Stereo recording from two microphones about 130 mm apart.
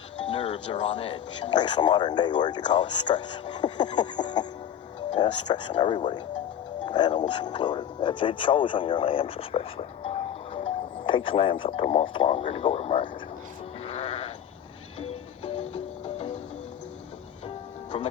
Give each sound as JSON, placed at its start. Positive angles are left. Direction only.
{"t": 0.3, "sound": "speech", "side_deg": 40}
{"t": 13.8, "sound": "sheep", "side_deg": 50}
{"t": 14.9, "sound": "music", "side_deg": 50}
{"t": 17.9, "sound": "music", "side_deg": 40}